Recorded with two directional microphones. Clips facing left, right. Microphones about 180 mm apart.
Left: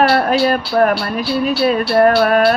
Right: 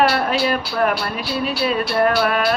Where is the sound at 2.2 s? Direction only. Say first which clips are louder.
Left 6 dB; 45° left (ahead or behind).